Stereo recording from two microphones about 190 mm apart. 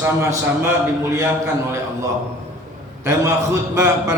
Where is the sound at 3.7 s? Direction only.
15° right (ahead or behind).